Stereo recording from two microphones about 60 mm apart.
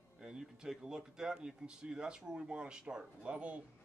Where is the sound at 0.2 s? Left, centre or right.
Centre.